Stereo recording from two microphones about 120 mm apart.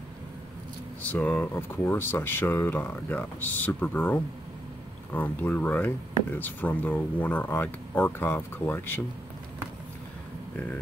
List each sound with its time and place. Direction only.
1.1 s speech: 10° left (ahead or behind)